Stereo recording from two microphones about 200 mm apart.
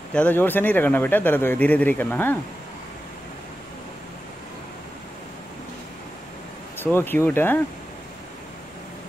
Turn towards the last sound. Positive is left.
turn(degrees=10)  # may be behind; listen again after turning